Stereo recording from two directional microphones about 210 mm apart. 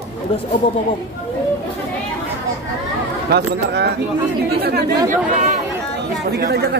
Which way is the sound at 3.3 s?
50° right (ahead or behind).